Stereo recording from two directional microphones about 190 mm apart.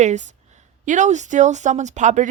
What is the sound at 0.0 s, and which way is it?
Speech, 40° right (ahead or behind).